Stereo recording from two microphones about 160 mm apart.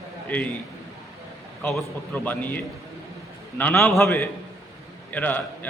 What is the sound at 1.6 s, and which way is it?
A man's voice, centre (ahead or behind).